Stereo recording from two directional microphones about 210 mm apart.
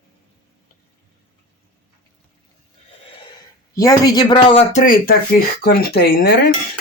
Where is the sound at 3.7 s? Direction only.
15° left (ahead or behind).